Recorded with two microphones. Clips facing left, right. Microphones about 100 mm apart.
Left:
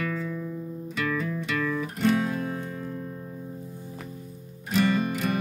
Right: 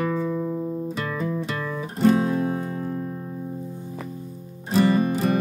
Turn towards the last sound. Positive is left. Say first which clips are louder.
# right 5 dB
turn(degrees=-35)  # may be behind; listen again after turning